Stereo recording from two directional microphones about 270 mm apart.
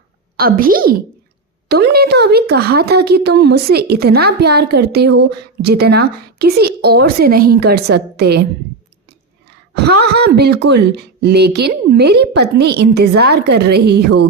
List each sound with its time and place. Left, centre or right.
0.3 s speech: right
9.7 s speech: right